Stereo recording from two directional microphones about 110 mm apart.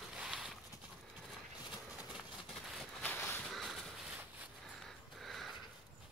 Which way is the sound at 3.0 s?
15° left (ahead or behind).